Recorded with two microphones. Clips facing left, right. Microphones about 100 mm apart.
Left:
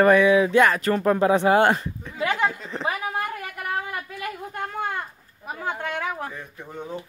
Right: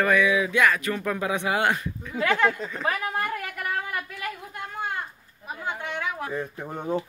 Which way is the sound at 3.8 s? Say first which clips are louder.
Left 1 dB; 25° left (ahead or behind).